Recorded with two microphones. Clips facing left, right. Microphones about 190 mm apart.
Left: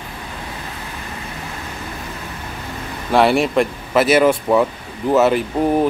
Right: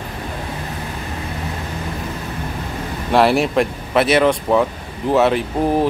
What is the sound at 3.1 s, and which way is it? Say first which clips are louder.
Speech: even; centre (ahead or behind).